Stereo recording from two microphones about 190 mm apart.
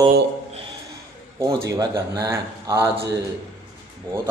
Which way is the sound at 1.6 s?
20° right (ahead or behind).